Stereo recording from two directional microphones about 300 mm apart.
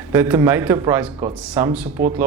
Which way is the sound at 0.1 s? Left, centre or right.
Centre.